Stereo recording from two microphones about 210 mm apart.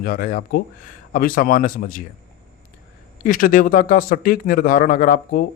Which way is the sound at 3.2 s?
40° left (ahead or behind).